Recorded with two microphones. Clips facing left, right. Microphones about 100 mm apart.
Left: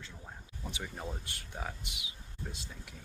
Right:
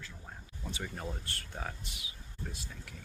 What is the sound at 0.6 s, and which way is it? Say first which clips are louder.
Speech: right 1 dB; 15° left (ahead or behind).